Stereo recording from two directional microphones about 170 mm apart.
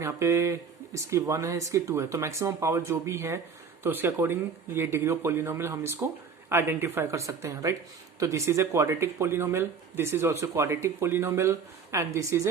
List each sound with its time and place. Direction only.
0.0 s speech: 15° right (ahead or behind)